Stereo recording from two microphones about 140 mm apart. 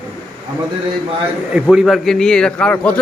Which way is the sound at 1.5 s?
5° right (ahead or behind).